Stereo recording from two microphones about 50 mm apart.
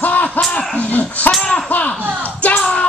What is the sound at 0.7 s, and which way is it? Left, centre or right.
Speech, left.